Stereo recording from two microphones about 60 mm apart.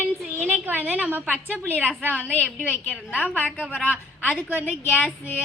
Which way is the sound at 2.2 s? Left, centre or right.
Left.